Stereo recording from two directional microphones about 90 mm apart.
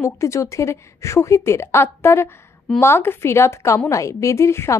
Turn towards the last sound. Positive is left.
turn(degrees=30)  # may be behind; listen again after turning